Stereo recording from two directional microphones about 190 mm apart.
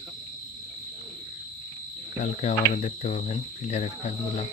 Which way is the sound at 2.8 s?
35° left (ahead or behind).